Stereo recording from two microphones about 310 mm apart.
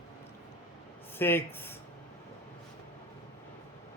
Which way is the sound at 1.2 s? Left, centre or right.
Centre.